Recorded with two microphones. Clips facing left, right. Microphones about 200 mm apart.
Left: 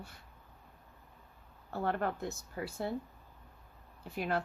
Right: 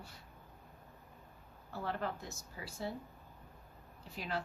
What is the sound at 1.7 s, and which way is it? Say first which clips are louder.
A woman's voice: left 5 dB; 55° left (ahead or behind).